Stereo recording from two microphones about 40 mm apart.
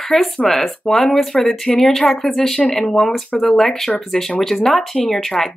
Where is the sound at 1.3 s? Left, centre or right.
Centre.